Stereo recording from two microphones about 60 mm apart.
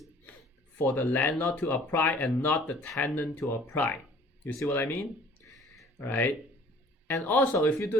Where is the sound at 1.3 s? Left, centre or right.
Centre.